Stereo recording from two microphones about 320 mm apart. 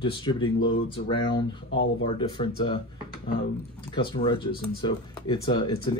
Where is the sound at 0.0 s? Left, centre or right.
Centre.